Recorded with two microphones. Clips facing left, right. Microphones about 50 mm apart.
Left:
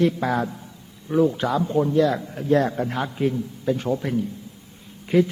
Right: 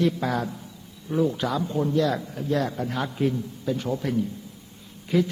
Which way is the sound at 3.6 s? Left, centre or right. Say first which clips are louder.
Left 4 dB; left.